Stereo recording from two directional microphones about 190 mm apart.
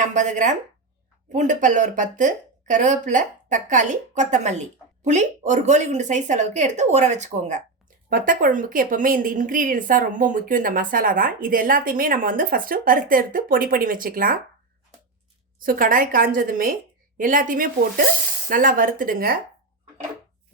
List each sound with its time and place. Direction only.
0.0 s a woman's voice: 40° right (ahead or behind)
15.5 s a woman's voice: 45° right (ahead or behind)